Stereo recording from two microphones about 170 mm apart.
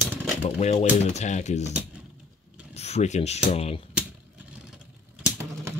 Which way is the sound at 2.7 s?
40° left (ahead or behind).